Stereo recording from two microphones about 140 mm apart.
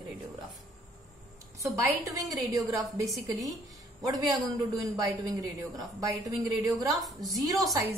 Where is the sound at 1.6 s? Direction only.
25° right (ahead or behind).